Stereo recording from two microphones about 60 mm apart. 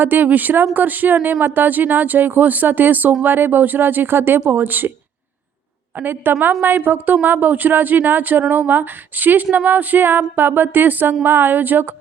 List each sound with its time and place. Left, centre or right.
0.0 s speech: right
6.0 s speech: right